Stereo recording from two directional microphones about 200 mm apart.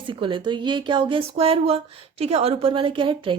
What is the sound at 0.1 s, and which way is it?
Speech, 25° right (ahead or behind).